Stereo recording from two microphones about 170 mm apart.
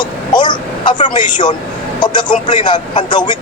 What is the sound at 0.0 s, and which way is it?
Vehicle, 25° left (ahead or behind).